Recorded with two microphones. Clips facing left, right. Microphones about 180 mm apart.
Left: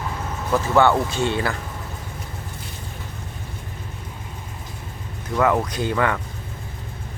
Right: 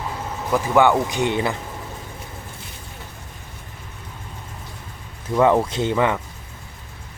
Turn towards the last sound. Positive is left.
turn(degrees=-20)  # may be behind; listen again after turning